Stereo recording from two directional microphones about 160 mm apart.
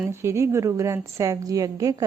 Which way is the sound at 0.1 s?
15° right (ahead or behind).